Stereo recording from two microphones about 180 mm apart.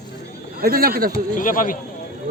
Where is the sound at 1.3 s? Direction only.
50° left (ahead or behind).